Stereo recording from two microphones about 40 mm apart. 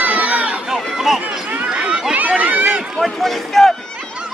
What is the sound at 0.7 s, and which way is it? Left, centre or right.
Chatter, centre.